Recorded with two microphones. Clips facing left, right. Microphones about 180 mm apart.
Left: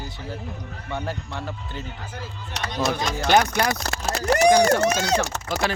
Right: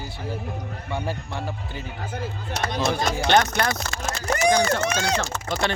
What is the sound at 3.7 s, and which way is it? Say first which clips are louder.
Speech: left 2 dB; 40° left (ahead or behind).